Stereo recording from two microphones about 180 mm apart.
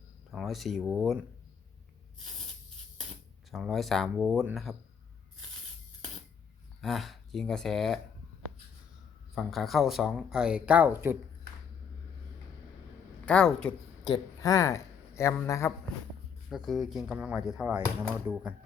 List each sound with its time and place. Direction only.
0.3 s speech: centre (ahead or behind)
3.5 s speech: centre (ahead or behind)
6.8 s speech: centre (ahead or behind)
9.3 s speech: centre (ahead or behind)
13.2 s speech: 5° left (ahead or behind)
14.1 s speech: 20° left (ahead or behind)
16.5 s speech: centre (ahead or behind)